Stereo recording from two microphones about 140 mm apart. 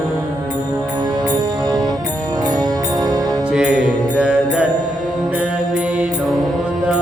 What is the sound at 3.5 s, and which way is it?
Music, 5° right (ahead or behind).